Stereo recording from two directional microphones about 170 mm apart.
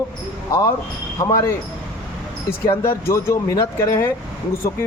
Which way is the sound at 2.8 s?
15° left (ahead or behind).